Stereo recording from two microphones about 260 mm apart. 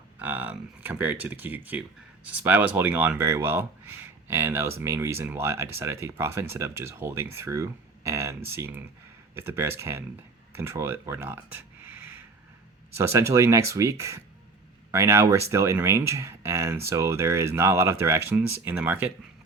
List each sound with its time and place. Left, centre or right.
0.2 s speech: centre
11.9 s a sound: left
13.0 s speech: centre
14.9 s speech: centre